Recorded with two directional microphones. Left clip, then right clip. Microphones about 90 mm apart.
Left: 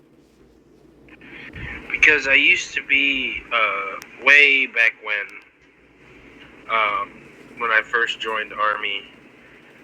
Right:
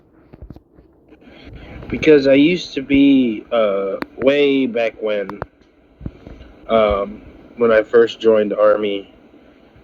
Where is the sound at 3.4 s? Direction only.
30° right (ahead or behind).